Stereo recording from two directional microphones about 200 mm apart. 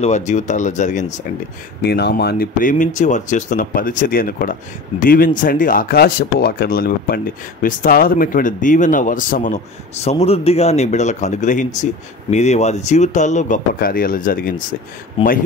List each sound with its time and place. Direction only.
0.0 s speech: 35° left (ahead or behind)
1.8 s speech: 55° left (ahead or behind)